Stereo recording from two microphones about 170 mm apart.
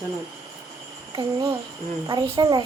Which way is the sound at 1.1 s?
20° right (ahead or behind).